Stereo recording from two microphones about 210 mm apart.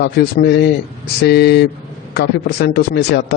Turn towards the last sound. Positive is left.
turn(degrees=50)  # may be behind; listen again after turning